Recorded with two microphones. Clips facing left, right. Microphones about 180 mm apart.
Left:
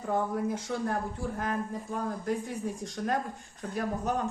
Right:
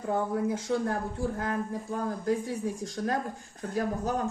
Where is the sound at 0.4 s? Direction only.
25° right (ahead or behind).